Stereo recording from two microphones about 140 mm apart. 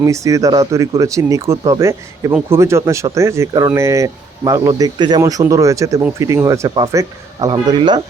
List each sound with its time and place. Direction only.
0.0 s speech: 25° right (ahead or behind)